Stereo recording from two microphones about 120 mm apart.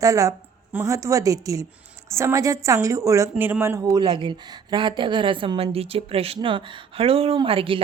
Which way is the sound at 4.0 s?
45° right (ahead or behind).